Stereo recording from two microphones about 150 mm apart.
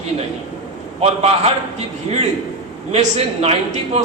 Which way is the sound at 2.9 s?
45° right (ahead or behind).